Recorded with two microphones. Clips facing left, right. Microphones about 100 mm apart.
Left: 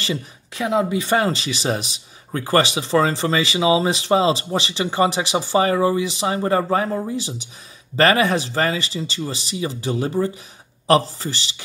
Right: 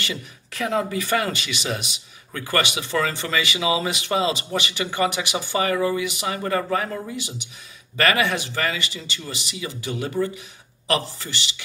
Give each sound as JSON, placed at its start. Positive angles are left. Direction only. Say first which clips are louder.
{"t": 0.5, "sound": "speech", "louder": "left 4 dB", "side_deg": 20}